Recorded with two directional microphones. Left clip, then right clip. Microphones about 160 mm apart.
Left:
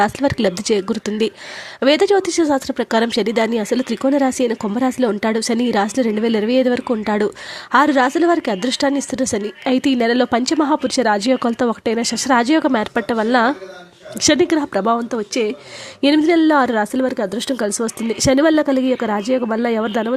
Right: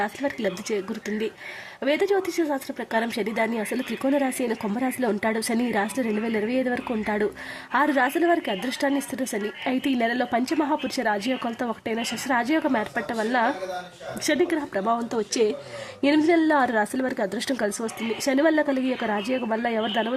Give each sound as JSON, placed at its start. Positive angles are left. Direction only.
{"t": 0.0, "sound": "a woman's voice", "side_deg": 35}
{"t": 17.7, "sound": "speech", "side_deg": 35}